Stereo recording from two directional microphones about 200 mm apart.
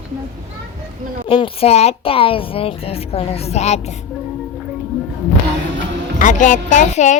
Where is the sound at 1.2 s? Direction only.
25° left (ahead or behind).